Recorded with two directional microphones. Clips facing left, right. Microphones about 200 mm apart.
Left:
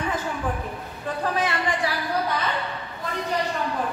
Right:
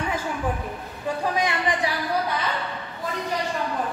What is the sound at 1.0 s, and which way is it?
Speech, 15° right (ahead or behind).